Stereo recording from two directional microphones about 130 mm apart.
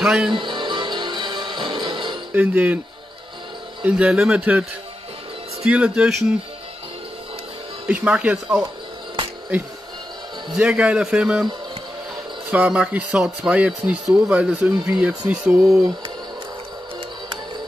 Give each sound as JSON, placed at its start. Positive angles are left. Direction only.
{"t": 0.0, "sound": "speech", "side_deg": -5}
{"t": 0.3, "sound": "music", "side_deg": -40}
{"t": 2.3, "sound": "speech", "side_deg": -10}
{"t": 3.8, "sound": "speech", "side_deg": -5}
{"t": 7.9, "sound": "speech", "side_deg": -10}
{"t": 10.5, "sound": "speech", "side_deg": -5}
{"t": 12.4, "sound": "speech", "side_deg": -10}